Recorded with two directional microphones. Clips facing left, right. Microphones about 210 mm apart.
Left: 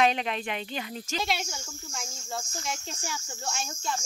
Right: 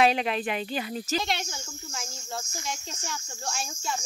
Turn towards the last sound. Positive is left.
turn(degrees=-5)  # may be behind; listen again after turning